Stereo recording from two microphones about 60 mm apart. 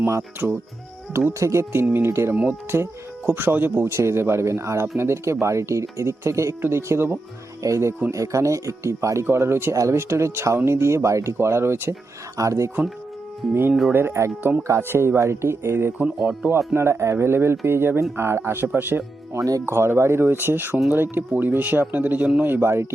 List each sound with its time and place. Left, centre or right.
0.2 s speech: right
1.3 s speech: right
2.3 s speech: right
2.7 s speech: right
3.9 s speech: right
9.2 s speech: right
9.7 s speech: right
10.0 s speech: right
12.4 s speech: right
13.5 s speech: right
16.0 s speech: right
16.6 s speech: right
19.3 s speech: right
19.6 s speech: right